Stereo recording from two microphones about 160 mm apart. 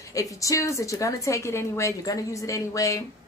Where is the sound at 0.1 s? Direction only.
20° left (ahead or behind).